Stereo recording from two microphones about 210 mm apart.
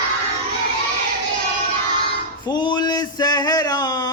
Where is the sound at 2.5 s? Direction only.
20° left (ahead or behind).